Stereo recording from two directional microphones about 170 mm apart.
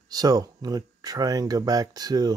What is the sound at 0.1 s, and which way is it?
Speech, 20° right (ahead or behind).